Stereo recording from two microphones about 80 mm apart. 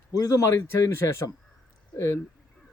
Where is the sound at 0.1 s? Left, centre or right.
Left.